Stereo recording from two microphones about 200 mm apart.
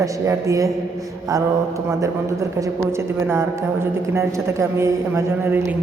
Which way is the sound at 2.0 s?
15° right (ahead or behind).